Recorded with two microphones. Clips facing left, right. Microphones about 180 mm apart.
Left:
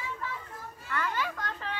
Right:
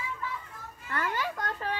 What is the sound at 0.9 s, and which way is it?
Children playing, 40° right (ahead or behind).